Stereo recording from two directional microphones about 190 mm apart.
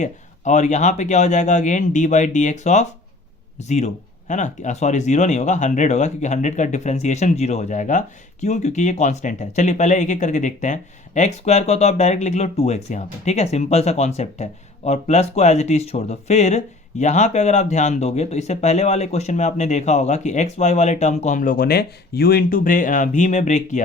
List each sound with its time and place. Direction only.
0.0 s speech: 40° left (ahead or behind)